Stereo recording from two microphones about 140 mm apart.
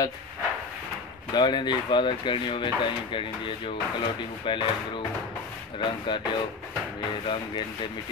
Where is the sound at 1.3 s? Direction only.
30° left (ahead or behind).